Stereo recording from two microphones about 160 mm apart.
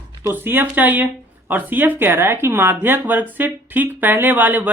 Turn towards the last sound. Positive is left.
turn(degrees=-10)  # may be behind; listen again after turning